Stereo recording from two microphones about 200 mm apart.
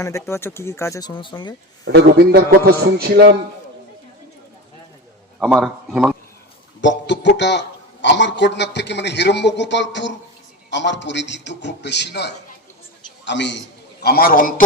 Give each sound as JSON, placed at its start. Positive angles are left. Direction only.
{"t": 0.0, "sound": "speech", "side_deg": 15}
{"t": 1.8, "sound": "a man's voice", "side_deg": -60}
{"t": 5.4, "sound": "a man's voice", "side_deg": 0}
{"t": 6.8, "sound": "a man's voice", "side_deg": 60}
{"t": 14.0, "sound": "a man's voice", "side_deg": 50}